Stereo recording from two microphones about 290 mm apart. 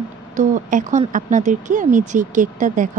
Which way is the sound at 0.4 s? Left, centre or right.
Right.